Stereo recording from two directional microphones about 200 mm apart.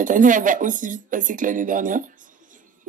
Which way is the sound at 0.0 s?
40° right (ahead or behind).